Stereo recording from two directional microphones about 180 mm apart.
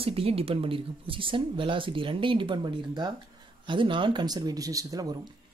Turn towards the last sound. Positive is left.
turn(degrees=-20)  # may be behind; listen again after turning